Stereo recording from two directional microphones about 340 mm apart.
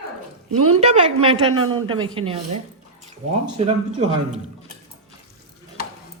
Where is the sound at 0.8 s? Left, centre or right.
Centre.